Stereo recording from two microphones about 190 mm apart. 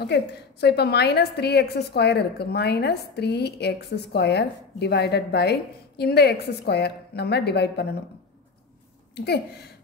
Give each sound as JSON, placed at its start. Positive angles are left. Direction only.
{"t": 0.0, "sound": "a woman's voice", "side_deg": 60}
{"t": 9.1, "sound": "a woman's voice", "side_deg": 60}